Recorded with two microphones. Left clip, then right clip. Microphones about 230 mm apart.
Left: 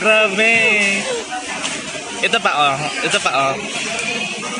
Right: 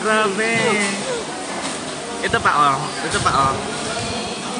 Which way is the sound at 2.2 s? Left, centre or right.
Left.